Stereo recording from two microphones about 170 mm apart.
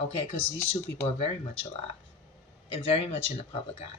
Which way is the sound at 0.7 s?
40° left (ahead or behind).